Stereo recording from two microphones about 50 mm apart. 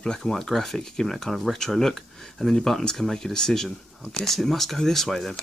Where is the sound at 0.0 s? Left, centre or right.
Centre.